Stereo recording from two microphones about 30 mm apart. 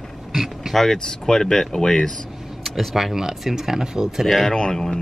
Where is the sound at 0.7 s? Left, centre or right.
Centre.